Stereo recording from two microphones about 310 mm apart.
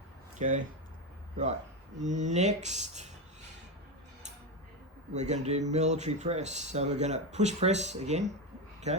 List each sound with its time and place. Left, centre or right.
0.3 s speech: right
2.0 s speech: right
5.1 s speech: right